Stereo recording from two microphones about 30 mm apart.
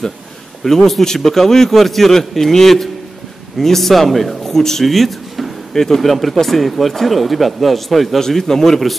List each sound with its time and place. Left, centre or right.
0.7 s a man's voice: centre
4.5 s speech: centre
4.8 s a sound: centre
5.7 s speech: centre
5.9 s speech: centre
8.2 s a man's voice: centre